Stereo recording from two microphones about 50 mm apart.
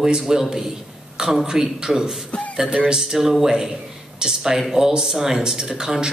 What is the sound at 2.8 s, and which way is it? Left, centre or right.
Speech, centre.